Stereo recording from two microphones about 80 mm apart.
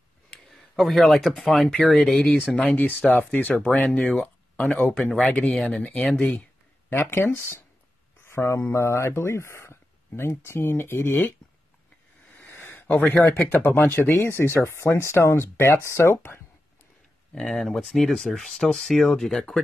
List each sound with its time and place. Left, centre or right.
0.3 s speech: centre
2.7 s speech: centre
4.2 s a sound: centre
4.9 s speech: centre
6.9 s speech: left
12.4 s a sound: left
13.4 s speech: left
17.3 s speech: centre